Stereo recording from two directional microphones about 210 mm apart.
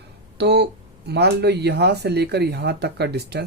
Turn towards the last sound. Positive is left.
turn(degrees=-50)  # may be behind; listen again after turning